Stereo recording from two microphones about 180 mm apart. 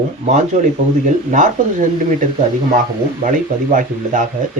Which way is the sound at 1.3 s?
45° right (ahead or behind).